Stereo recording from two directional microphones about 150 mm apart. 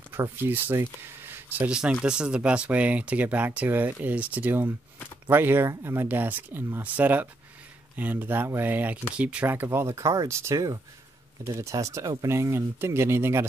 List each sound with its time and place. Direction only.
0.1 s speech: 15° right (ahead or behind)